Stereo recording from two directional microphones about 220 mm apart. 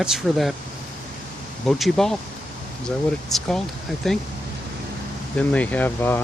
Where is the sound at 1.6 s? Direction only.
Centre (ahead or behind).